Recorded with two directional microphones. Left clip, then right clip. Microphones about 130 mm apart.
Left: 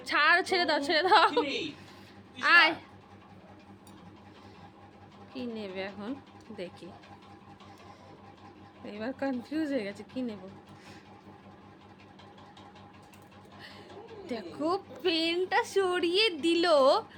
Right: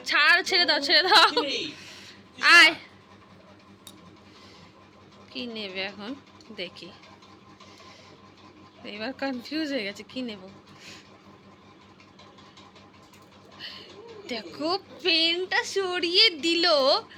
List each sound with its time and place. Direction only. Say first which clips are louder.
0.0 s a woman's voice: right 4 dB; 20° left (ahead or behind)
5.3 s speech: right 4 dB; 10° left (ahead or behind)
8.8 s speech: right 3 dB; 10° left (ahead or behind)
13.6 s bird: right 9 dB; 15° left (ahead or behind)
14.3 s a woman's voice: right 3 dB; 15° left (ahead or behind)